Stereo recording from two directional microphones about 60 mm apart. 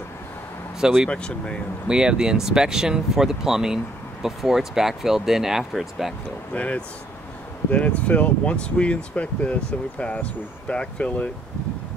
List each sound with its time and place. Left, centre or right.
0.7 s speech: centre
1.1 s speech: centre
1.9 s speech: centre
6.5 s speech: left